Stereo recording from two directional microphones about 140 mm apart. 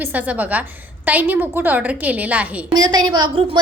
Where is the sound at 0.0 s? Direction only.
10° right (ahead or behind).